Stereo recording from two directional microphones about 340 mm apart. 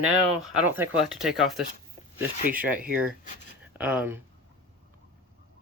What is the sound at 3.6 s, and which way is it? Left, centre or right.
Speech, centre.